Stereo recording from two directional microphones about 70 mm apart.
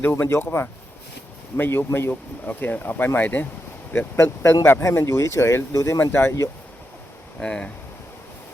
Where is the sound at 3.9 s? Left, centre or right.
Left.